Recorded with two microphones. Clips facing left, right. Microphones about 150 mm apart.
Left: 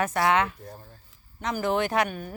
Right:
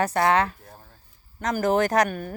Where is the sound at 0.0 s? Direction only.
35° right (ahead or behind).